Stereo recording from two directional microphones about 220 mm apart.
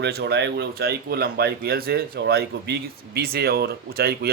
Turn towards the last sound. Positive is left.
turn(degrees=-45)  # may be behind; listen again after turning